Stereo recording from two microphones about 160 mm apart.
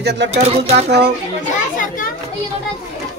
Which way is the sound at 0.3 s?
40° right (ahead or behind).